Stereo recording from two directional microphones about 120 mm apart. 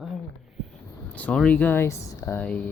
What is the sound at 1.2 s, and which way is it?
Speech, 10° left (ahead or behind).